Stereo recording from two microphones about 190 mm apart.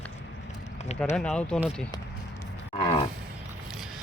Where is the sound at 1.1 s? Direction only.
5° left (ahead or behind).